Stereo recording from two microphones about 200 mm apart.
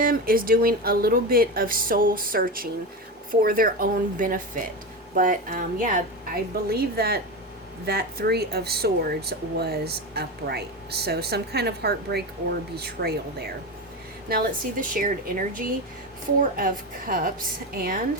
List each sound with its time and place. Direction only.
0.0 s speech: 45° right (ahead or behind)